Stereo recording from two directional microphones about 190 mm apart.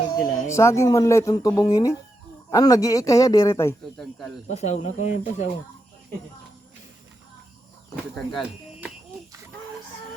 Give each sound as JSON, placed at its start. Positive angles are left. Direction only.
{"t": 0.1, "sound": "a man's voice", "side_deg": 15}
{"t": 4.4, "sound": "speech", "side_deg": 35}
{"t": 8.1, "sound": "speech", "side_deg": 0}